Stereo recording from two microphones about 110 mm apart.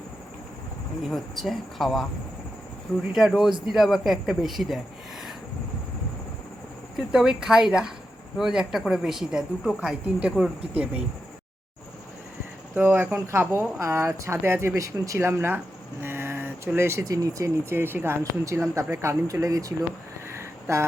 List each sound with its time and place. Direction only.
1.1 s speech: centre (ahead or behind)
3.1 s speech: 5° right (ahead or behind)
6.9 s speech: 5° right (ahead or behind)
12.7 s speech: 15° right (ahead or behind)
20.4 s a sound: 25° right (ahead or behind)